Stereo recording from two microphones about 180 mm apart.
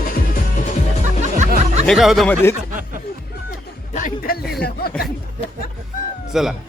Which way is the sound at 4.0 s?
50° left (ahead or behind).